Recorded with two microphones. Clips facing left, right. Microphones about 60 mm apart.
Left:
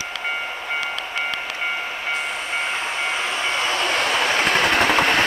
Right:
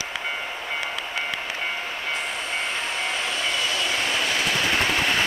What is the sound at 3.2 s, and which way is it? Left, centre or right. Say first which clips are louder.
Train: left 3 dB; left.